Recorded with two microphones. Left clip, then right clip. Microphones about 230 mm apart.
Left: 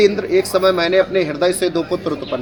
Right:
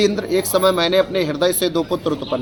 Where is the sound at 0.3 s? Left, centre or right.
Right.